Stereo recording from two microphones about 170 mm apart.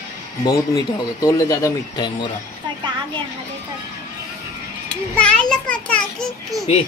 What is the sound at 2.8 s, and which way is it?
Children playing, 25° right (ahead or behind).